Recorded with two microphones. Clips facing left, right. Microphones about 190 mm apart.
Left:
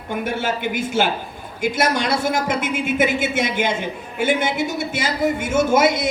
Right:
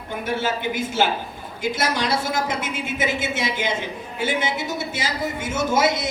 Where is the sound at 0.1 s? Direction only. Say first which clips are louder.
Left 2 dB; 55° left (ahead or behind).